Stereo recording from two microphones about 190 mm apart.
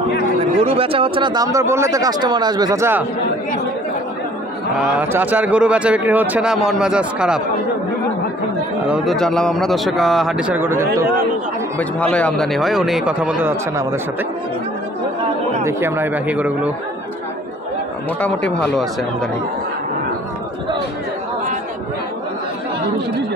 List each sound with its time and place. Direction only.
0.6 s speech: 30° right (ahead or behind); by 3.1 s 10° right (ahead or behind)
4.7 s a man's voice: 5° right (ahead or behind)
8.8 s a man's voice: 5° right (ahead or behind)
11.8 s a man's voice: 5° left (ahead or behind); by 13.8 s 10° right (ahead or behind)
15.6 s speech: 15° right (ahead or behind)
18.2 s a man's voice: 5° left (ahead or behind)